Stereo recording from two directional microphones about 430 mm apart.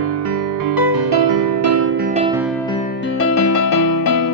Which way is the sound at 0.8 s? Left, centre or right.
Right.